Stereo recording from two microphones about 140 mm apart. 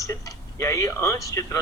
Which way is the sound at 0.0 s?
20° left (ahead or behind).